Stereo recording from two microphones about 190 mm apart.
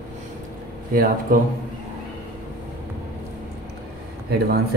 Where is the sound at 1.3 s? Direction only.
50° right (ahead or behind).